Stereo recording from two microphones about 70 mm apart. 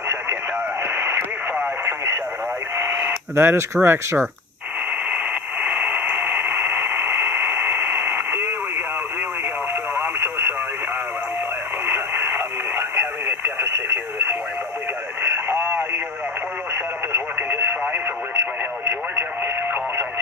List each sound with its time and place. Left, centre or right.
3.3 s speech: right
5.6 s radio: centre
9.9 s radio: right
11.8 s radio: right
15.3 s radio: right
17.4 s radio: right